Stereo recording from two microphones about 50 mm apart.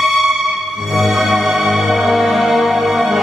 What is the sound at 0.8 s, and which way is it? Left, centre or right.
Music, centre.